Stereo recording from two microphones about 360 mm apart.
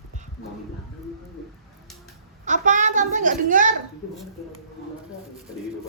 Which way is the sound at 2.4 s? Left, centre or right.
Right.